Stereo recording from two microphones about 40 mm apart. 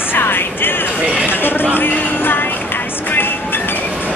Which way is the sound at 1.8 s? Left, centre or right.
Left.